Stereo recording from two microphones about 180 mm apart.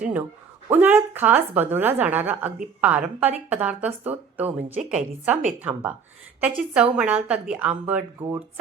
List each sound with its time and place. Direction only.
0.0 s a woman's voice: 10° right (ahead or behind)